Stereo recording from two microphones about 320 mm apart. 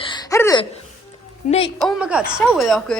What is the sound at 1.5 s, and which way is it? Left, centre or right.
Speech, centre.